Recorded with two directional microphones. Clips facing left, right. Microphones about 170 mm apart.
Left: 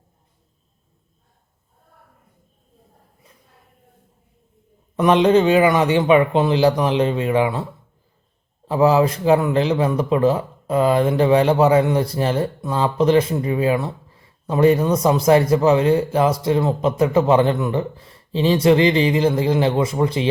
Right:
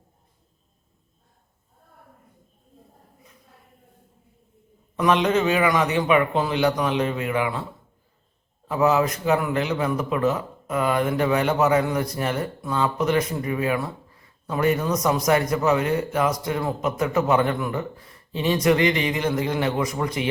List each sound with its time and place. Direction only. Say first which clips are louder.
4.9 s a man's voice: left 6 dB; 30° left (ahead or behind)
8.6 s a man's voice: left 5 dB; 30° left (ahead or behind)